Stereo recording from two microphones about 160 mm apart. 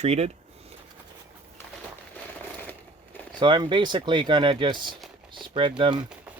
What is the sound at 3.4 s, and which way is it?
Speech, 30° right (ahead or behind).